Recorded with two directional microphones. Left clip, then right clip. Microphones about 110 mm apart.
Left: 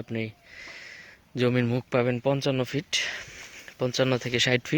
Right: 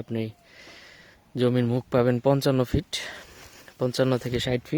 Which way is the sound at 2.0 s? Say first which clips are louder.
Right 4 dB; 70° right (ahead or behind).